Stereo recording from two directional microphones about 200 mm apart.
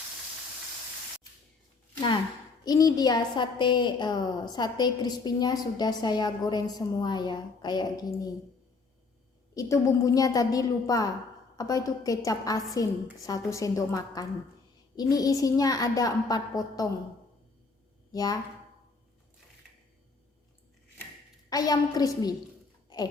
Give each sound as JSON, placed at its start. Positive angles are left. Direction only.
{"t": 2.6, "sound": "a woman's voice", "side_deg": 20}
{"t": 9.6, "sound": "a woman's voice", "side_deg": 15}
{"t": 18.1, "sound": "speech", "side_deg": 20}
{"t": 21.5, "sound": "a woman's voice", "side_deg": 20}